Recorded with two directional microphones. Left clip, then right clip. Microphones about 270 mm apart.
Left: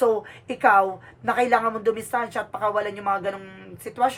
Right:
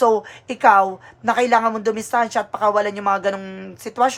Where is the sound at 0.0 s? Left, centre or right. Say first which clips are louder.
Right 5 dB; centre.